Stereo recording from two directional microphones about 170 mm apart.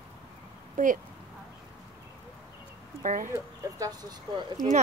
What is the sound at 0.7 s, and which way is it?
Speech, 50° right (ahead or behind).